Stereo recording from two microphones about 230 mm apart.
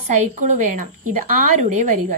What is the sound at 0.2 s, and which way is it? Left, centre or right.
A woman's voice, right.